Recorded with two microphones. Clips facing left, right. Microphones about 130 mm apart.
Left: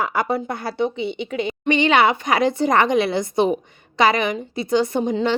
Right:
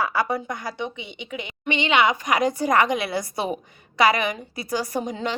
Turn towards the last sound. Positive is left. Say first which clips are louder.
# left 7 dB
turn(degrees=25)  # may be behind; listen again after turning